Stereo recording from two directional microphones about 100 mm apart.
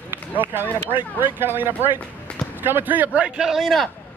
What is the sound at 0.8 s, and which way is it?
A man's voice, 20° right (ahead or behind).